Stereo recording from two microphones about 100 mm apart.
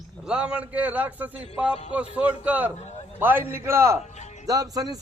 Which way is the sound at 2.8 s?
90° left.